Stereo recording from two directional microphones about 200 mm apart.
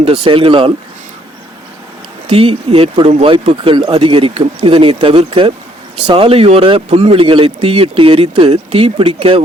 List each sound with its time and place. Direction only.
0.0 s speech: 25° right (ahead or behind)
2.2 s speech: 30° right (ahead or behind)